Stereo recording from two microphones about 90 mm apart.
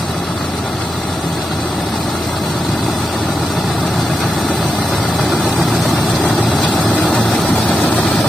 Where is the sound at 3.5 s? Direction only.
Centre (ahead or behind); by 8.0 s 15° left (ahead or behind).